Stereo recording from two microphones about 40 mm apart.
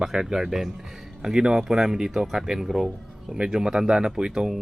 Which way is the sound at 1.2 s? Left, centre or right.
Centre.